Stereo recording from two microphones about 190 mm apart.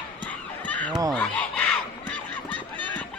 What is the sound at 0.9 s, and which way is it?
Speech, 20° right (ahead or behind).